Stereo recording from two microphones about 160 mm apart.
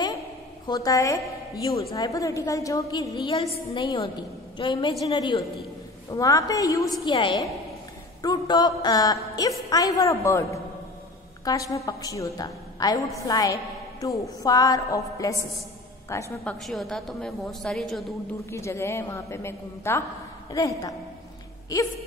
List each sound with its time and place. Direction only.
0.7 s a woman's voice: 20° left (ahead or behind)
16.6 s a woman's voice: centre (ahead or behind)
18.5 s a woman's voice: 15° left (ahead or behind)